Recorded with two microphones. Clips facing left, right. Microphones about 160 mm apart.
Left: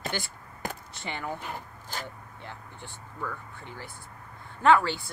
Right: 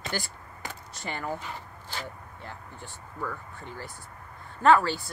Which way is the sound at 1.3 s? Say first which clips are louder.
Left 1 dB; 50° left (ahead or behind).